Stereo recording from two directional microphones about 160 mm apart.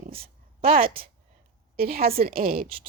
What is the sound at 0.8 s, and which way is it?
Speech, 35° right (ahead or behind).